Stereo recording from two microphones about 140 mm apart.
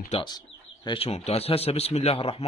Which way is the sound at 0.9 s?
45° left (ahead or behind).